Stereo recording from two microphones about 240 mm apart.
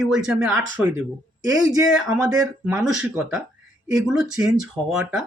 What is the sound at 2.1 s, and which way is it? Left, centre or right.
Speech, centre.